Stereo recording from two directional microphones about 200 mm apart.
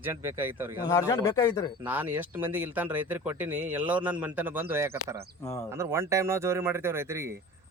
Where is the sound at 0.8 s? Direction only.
15° left (ahead or behind).